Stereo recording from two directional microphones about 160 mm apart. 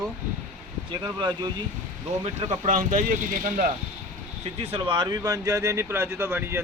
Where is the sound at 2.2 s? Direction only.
45° right (ahead or behind).